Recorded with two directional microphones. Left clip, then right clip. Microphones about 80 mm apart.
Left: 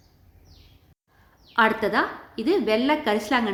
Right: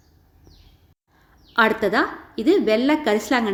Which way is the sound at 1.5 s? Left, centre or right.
Right.